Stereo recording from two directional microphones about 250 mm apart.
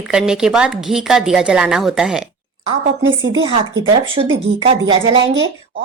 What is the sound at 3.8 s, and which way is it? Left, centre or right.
Speech, right.